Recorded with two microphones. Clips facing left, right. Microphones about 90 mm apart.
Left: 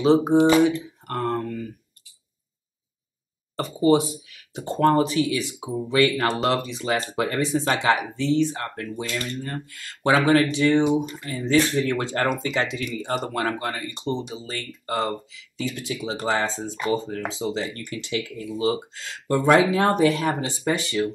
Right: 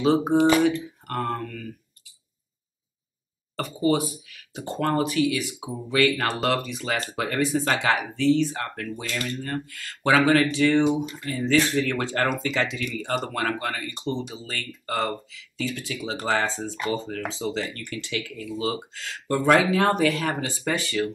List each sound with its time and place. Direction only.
0.0 s speech: 25° left (ahead or behind)
3.5 s speech: 25° left (ahead or behind)